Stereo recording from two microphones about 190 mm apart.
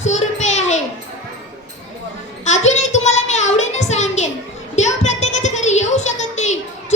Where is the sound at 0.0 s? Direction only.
40° left (ahead or behind).